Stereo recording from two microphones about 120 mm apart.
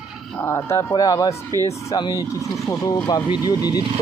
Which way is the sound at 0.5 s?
25° left (ahead or behind).